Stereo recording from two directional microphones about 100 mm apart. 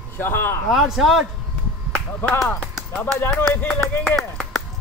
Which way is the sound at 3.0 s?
20° left (ahead or behind).